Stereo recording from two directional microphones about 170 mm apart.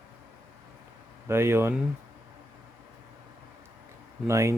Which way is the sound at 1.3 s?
15° right (ahead or behind).